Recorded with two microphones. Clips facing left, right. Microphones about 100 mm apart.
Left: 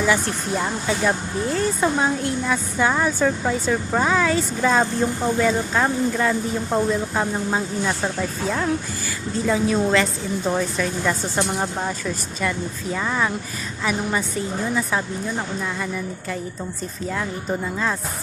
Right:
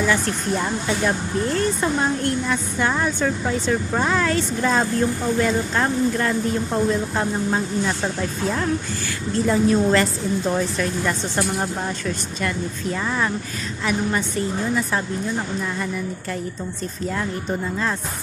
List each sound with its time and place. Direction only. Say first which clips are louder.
0.0 s a woman's voice: even; 5° left (ahead or behind)
11.3 s speech: even; 25° left (ahead or behind)
12.0 s a woman's voice: even; 5° left (ahead or behind)